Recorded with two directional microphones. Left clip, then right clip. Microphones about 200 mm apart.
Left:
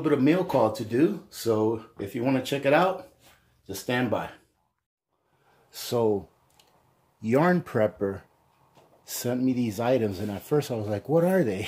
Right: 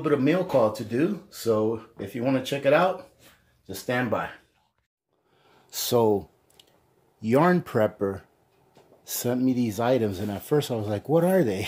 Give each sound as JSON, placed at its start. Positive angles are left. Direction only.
{"t": 0.0, "sound": "speech", "side_deg": 5}
{"t": 5.7, "sound": "speech", "side_deg": -40}
{"t": 7.2, "sound": "speech", "side_deg": -15}